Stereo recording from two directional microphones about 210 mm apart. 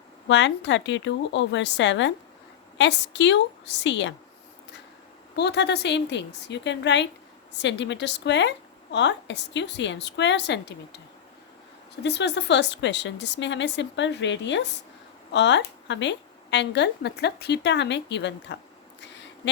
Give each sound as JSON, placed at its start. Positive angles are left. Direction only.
{"t": 0.3, "sound": "a woman's voice", "side_deg": 60}
{"t": 5.4, "sound": "a woman's voice", "side_deg": 55}
{"t": 12.0, "sound": "a woman's voice", "side_deg": 55}